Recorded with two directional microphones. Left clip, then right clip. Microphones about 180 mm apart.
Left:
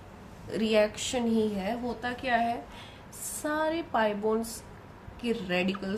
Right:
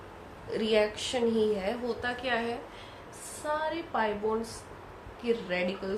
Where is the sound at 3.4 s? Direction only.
50° left (ahead or behind).